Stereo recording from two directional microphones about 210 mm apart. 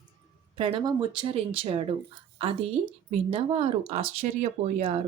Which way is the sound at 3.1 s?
30° right (ahead or behind).